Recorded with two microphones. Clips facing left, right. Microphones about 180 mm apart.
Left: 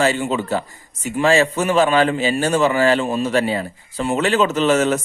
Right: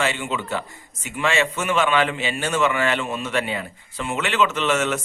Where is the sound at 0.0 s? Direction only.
40° left (ahead or behind).